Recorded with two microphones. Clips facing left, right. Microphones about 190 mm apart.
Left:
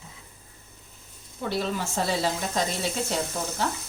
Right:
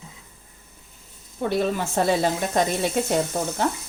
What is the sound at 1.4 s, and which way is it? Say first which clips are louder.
A woman's voice: right 5 dB; 55° right (ahead or behind).